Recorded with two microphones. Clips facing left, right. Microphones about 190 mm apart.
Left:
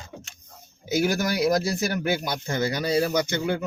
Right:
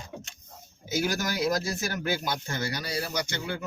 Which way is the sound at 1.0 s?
15° left (ahead or behind).